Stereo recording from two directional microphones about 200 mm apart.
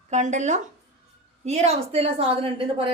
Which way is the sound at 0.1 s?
35° right (ahead or behind).